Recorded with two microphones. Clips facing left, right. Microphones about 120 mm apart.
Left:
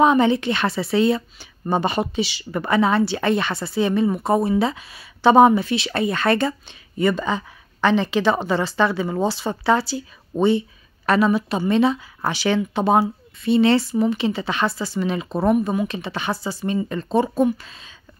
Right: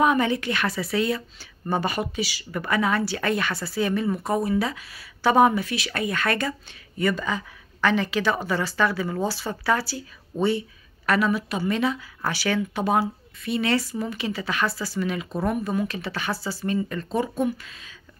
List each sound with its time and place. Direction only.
0.0 s a woman's voice: 25° left (ahead or behind)
15.5 s a woman's voice: 15° left (ahead or behind); by 17.9 s 30° left (ahead or behind)